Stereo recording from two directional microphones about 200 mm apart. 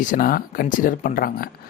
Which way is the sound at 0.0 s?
40° left (ahead or behind).